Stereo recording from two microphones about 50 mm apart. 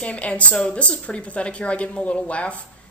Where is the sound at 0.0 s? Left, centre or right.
Left.